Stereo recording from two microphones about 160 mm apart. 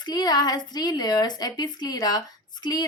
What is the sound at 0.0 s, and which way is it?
A woman's voice, 25° left (ahead or behind).